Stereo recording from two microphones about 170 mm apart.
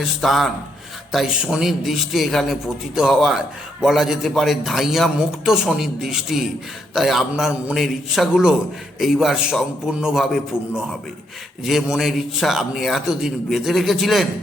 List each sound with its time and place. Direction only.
0.0 s a man's voice: centre (ahead or behind)
11.6 s a man's voice: centre (ahead or behind)